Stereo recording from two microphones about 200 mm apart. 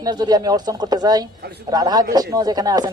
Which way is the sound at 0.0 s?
20° right (ahead or behind).